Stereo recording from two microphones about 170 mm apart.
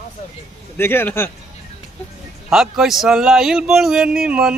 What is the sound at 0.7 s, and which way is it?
Speech, 15° left (ahead or behind).